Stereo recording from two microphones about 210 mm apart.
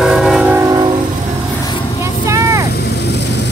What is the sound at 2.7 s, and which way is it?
Vehicle, 50° left (ahead or behind).